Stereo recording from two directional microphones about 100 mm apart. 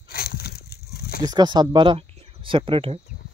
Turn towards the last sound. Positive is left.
turn(degrees=-65)  # may be behind; listen again after turning